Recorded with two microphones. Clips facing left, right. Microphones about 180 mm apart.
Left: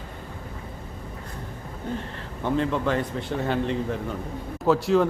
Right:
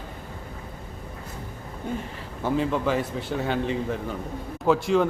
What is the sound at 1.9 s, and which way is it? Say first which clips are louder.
A man's voice: even; 5° right (ahead or behind).